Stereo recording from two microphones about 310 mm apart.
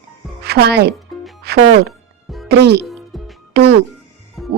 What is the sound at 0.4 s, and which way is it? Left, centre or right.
Speech, right.